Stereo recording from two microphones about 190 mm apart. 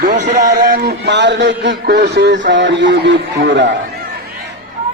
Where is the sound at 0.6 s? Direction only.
50° right (ahead or behind).